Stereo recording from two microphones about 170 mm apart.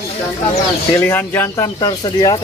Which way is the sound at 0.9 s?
15° left (ahead or behind).